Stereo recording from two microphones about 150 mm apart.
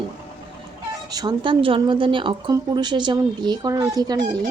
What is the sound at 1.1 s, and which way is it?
A woman's voice, 30° right (ahead or behind).